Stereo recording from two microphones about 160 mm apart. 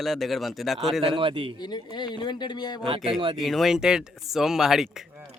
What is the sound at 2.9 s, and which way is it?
Speech, 35° right (ahead or behind).